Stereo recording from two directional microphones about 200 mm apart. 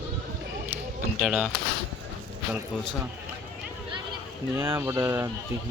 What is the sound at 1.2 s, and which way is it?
Speech, 5° right (ahead or behind).